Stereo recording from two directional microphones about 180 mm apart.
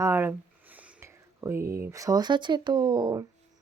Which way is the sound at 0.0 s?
10° right (ahead or behind).